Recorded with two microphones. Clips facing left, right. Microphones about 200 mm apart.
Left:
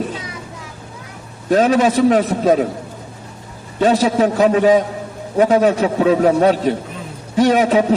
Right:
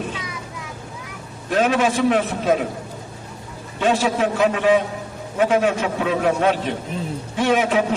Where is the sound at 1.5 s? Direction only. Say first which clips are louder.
Left 5 dB; 40° left (ahead or behind).